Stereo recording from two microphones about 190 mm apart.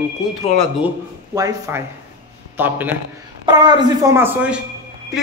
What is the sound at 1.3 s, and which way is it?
A man's voice, 15° right (ahead or behind).